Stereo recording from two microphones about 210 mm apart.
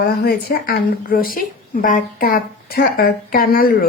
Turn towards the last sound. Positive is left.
turn(degrees=45)  # may be behind; listen again after turning